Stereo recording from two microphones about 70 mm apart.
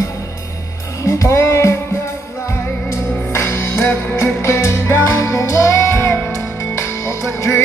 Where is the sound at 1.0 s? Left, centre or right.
Left.